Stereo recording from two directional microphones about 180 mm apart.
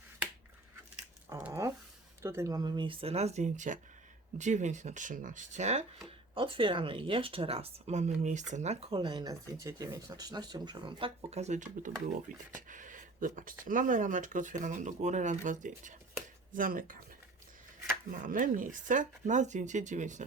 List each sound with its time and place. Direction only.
1.3 s a sound: 15° right (ahead or behind)
2.2 s speech: 15° right (ahead or behind); by 5.8 s 40° right (ahead or behind)
6.1 s speech: 30° right (ahead or behind); by 17.0 s 50° right (ahead or behind)
18.2 s speech: 45° right (ahead or behind)